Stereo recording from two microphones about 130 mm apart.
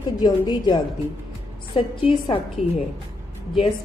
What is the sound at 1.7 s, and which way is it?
Speech, 45° left (ahead or behind).